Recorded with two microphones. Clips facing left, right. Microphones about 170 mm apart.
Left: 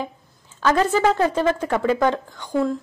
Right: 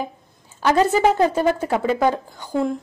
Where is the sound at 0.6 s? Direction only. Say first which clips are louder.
Right 2 dB; 15° right (ahead or behind).